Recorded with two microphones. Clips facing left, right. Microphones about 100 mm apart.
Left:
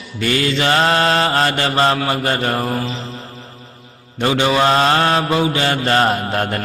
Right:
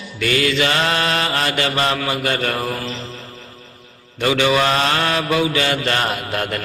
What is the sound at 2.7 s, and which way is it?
Mantra, 20° left (ahead or behind).